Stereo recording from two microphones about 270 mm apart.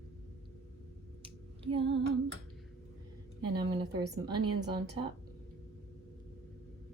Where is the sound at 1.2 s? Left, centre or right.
Centre.